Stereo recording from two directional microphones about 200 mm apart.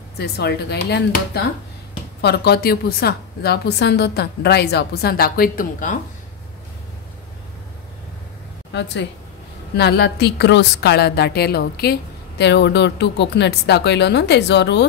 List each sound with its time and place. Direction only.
0.2 s a woman's voice: 55° left (ahead or behind)
2.2 s a woman's voice: 55° left (ahead or behind)
8.7 s a woman's voice: 60° left (ahead or behind)